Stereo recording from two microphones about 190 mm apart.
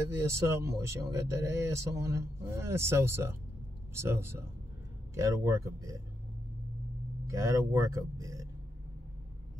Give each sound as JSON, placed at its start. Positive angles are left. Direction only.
{"t": 0.0, "sound": "speech", "side_deg": -15}
{"t": 7.2, "sound": "speech", "side_deg": -15}